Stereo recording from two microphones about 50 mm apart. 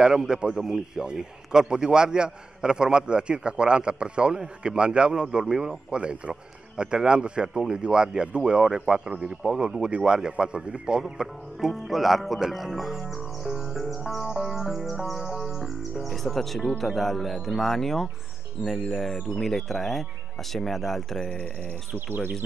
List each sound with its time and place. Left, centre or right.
0.0 s a man's voice: centre
5.9 s a man's voice: right; by 13.0 s centre
13.1 s music: centre
16.7 s speech: centre
21.3 s speech: left